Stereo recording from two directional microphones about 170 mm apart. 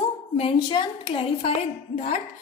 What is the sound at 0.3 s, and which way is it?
A woman's voice, 30° left (ahead or behind).